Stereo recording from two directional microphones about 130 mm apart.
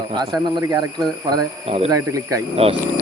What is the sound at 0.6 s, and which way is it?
Speech, 30° right (ahead or behind).